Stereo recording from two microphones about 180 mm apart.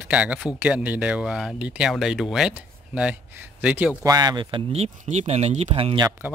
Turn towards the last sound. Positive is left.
turn(degrees=-30)  # may be behind; listen again after turning